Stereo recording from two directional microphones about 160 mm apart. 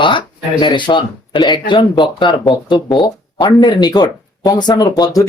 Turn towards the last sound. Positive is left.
turn(degrees=25)  # may be behind; listen again after turning